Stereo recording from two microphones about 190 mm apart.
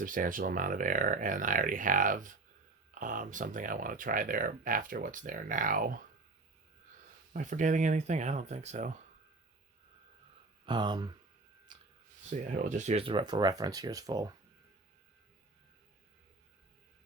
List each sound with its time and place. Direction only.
0.0 s speech: 45° right (ahead or behind)
7.3 s speech: 40° right (ahead or behind)
10.7 s speech: 25° right (ahead or behind)
11.7 s a sound: 25° right (ahead or behind)
12.3 s speech: 40° right (ahead or behind); by 14.3 s 20° right (ahead or behind)